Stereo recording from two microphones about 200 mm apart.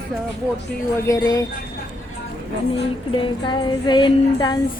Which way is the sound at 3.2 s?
25° left (ahead or behind).